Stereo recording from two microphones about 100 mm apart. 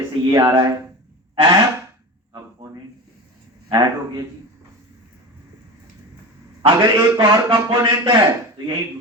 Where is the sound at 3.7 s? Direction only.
40° right (ahead or behind).